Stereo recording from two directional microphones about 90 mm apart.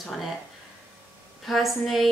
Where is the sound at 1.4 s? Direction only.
Centre (ahead or behind).